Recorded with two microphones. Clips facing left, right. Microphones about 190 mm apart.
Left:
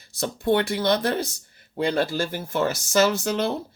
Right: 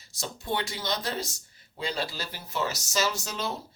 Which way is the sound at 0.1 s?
60° left (ahead or behind).